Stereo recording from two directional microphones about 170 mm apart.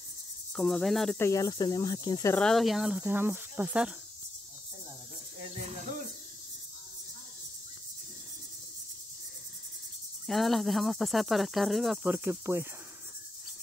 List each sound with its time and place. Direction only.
0.6 s cricket: centre (ahead or behind)
1.1 s speech: 15° left (ahead or behind)
2.3 s cricket: 5° left (ahead or behind)
5.4 s a sound: 45° right (ahead or behind)
10.2 s cricket: centre (ahead or behind)